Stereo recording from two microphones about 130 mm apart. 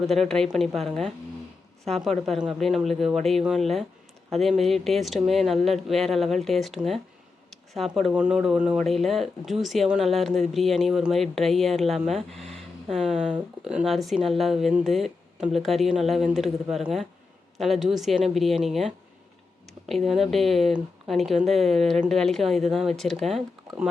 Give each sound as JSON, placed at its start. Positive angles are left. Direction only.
{"t": 0.1, "sound": "speech", "side_deg": 5}